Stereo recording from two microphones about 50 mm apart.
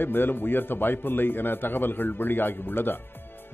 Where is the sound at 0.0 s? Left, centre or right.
Left.